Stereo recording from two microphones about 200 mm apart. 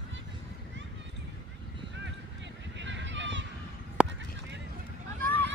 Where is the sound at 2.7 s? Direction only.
65° right (ahead or behind).